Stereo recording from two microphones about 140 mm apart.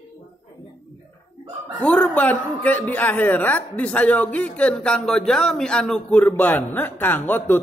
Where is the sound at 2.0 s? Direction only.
10° left (ahead or behind).